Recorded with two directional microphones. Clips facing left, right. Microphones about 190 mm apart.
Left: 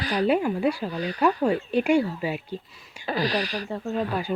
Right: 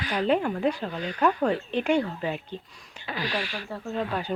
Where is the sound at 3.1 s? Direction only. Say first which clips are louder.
Left 5 dB; 35° left (ahead or behind).